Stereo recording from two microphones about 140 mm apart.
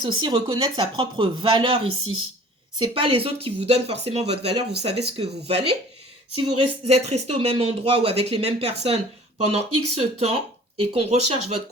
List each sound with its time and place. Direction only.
0.0 s speech: 35° right (ahead or behind)